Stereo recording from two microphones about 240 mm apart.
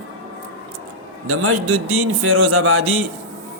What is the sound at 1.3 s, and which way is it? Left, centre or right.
Speech, right.